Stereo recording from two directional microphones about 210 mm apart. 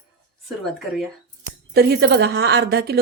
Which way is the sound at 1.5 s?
50° right (ahead or behind).